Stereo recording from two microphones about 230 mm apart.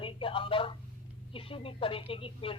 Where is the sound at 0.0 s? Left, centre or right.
Left.